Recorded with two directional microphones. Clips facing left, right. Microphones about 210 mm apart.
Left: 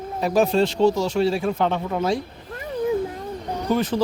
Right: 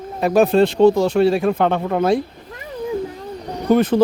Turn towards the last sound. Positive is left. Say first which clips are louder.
# right 7 dB
turn(degrees=-55)  # may be behind; listen again after turning